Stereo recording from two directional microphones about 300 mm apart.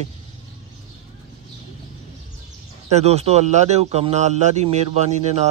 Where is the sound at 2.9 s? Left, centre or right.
Right.